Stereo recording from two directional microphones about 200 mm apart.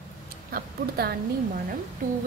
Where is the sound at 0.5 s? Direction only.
50° right (ahead or behind).